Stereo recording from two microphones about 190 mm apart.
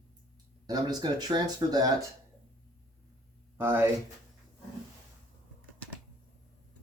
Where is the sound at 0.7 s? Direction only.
20° right (ahead or behind).